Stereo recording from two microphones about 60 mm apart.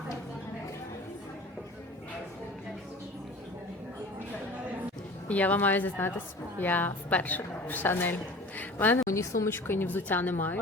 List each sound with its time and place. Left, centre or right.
5.3 s a woman's voice: left
9.0 s a woman's voice: left
9.5 s a woman's voice: left